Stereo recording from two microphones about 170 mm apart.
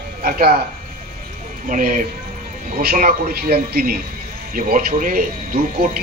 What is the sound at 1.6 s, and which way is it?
A man's voice, 50° right (ahead or behind).